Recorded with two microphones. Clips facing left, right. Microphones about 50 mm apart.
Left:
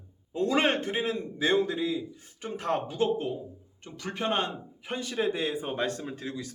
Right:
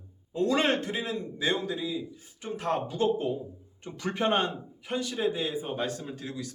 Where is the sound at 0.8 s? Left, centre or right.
Left.